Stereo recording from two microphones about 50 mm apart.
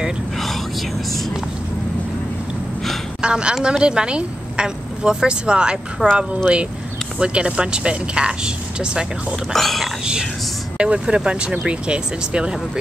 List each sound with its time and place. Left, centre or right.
3.2 s a woman's voice: centre
9.5 s speech: centre
10.8 s speech: right